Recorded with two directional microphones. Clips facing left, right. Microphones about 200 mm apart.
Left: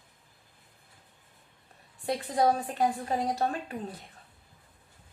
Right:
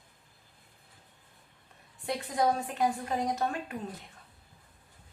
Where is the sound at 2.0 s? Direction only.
35° left (ahead or behind).